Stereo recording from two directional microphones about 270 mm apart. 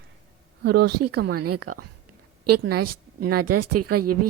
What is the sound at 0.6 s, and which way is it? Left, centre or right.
Speech, right.